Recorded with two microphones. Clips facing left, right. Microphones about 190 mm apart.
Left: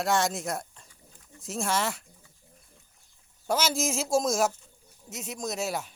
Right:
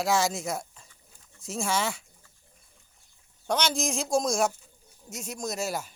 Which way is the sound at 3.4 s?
5° left (ahead or behind).